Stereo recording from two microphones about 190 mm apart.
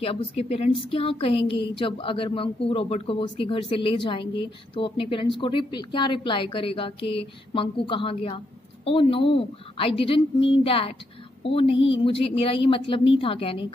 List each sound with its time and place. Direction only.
0.0 s a woman's voice: 30° left (ahead or behind)